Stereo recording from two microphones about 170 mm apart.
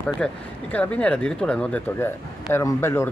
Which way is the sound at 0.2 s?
5° left (ahead or behind).